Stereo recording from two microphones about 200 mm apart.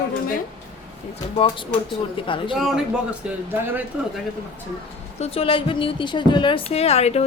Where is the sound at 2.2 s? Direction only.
25° left (ahead or behind).